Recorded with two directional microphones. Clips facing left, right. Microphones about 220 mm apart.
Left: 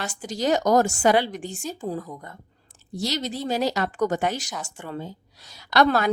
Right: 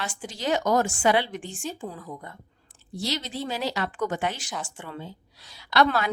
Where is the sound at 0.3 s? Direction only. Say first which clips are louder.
Left 4 dB; 40° left (ahead or behind).